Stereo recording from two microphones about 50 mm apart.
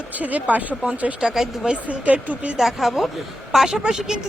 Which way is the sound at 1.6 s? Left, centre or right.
Right.